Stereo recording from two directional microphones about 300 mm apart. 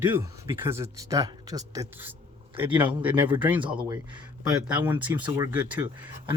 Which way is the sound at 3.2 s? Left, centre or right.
Centre.